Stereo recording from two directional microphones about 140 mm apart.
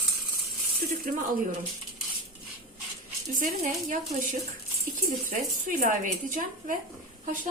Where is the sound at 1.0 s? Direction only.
90° right.